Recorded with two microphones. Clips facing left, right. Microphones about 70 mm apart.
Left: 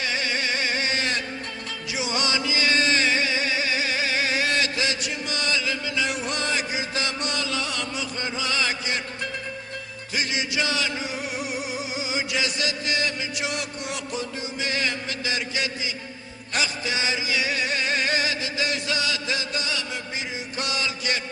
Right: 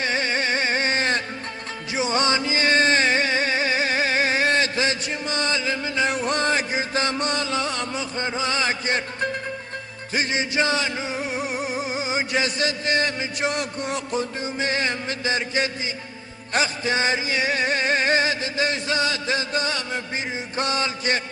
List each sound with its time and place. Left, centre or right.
0.0 s music: right